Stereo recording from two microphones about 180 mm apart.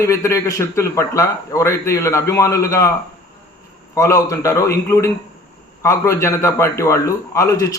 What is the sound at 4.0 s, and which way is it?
A man's voice, 15° left (ahead or behind).